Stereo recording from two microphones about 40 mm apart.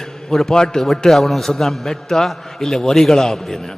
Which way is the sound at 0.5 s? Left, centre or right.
Centre.